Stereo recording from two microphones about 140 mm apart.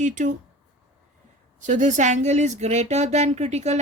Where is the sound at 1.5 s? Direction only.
60° right (ahead or behind).